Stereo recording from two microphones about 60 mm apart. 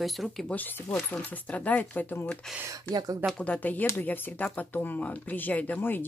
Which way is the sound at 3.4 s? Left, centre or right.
Left.